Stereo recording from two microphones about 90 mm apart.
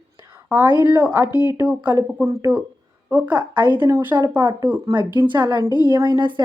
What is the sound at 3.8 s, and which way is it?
Speech, 30° right (ahead or behind).